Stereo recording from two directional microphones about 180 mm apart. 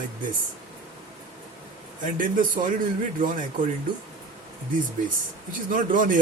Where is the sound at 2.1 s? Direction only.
50° right (ahead or behind).